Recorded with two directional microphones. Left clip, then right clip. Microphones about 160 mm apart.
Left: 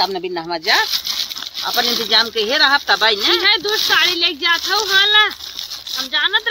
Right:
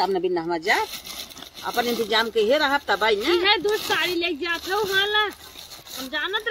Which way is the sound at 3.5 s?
15° right (ahead or behind).